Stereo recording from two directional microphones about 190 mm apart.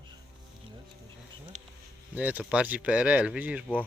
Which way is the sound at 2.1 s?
10° right (ahead or behind).